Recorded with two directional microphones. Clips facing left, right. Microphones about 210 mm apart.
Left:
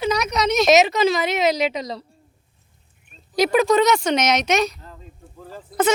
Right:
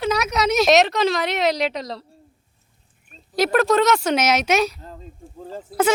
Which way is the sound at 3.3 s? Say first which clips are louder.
Left 1 dB; centre (ahead or behind).